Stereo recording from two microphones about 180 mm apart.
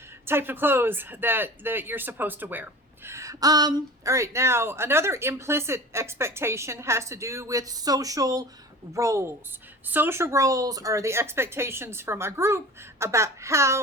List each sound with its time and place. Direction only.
0.3 s speech: 10° right (ahead or behind)